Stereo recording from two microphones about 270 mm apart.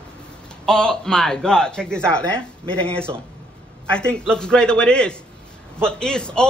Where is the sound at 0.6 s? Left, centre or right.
Centre.